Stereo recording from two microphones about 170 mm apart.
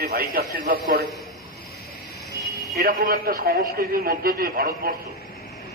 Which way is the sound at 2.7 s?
60° right (ahead or behind).